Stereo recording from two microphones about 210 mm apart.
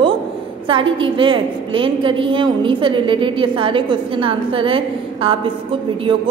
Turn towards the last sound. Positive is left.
turn(degrees=-25)  # may be behind; listen again after turning